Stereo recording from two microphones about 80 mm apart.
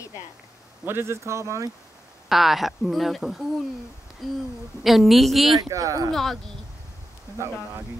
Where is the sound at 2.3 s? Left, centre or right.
Centre.